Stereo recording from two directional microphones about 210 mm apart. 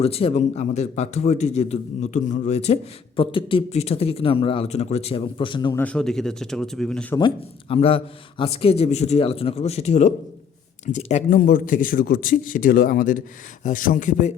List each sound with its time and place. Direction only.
0.0 s a man's voice: 30° left (ahead or behind)
5.7 s speech: 5° left (ahead or behind)
7.2 s a man's voice: 25° left (ahead or behind)